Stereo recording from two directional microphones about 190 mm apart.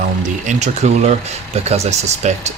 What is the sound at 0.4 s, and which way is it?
Speech, 35° right (ahead or behind).